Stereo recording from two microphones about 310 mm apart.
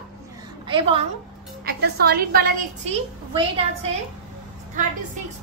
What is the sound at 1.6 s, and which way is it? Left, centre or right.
Speech, right.